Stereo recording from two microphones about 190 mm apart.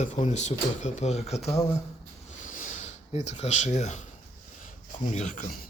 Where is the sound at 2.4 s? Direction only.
45° left (ahead or behind).